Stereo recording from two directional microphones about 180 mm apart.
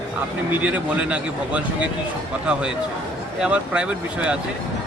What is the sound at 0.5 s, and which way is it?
Speech, 5° right (ahead or behind).